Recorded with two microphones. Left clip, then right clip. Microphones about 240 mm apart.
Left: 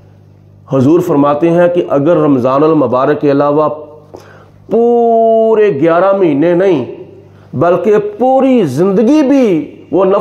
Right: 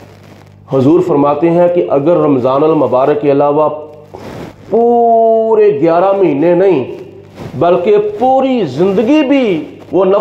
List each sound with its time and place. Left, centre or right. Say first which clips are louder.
0.8 s a man's voice: even; left
4.6 s a man's voice: even; left